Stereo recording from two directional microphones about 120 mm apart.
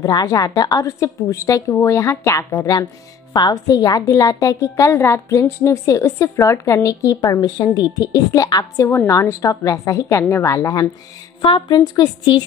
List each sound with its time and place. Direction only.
0.0 s a woman's voice: 35° left (ahead or behind)
11.4 s a woman's voice: 40° left (ahead or behind)